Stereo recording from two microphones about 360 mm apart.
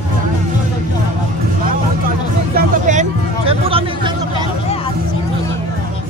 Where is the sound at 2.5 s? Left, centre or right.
Centre.